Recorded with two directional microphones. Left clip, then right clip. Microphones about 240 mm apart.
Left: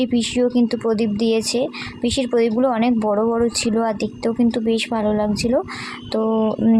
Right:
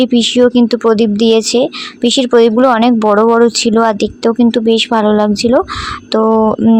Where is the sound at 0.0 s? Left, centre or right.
Right.